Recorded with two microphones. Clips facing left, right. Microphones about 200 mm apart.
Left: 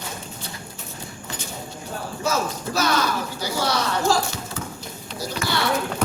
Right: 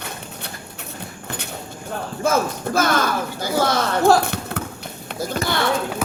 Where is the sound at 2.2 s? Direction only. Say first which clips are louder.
Right 5 dB; 50° right (ahead or behind).